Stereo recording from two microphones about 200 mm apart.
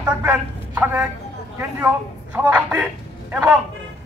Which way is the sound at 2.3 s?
10° right (ahead or behind).